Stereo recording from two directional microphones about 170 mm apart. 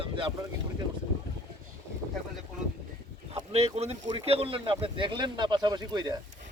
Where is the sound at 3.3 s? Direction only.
35° right (ahead or behind).